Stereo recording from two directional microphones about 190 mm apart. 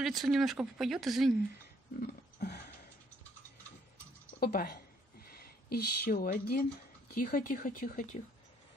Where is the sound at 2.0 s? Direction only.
60° left (ahead or behind).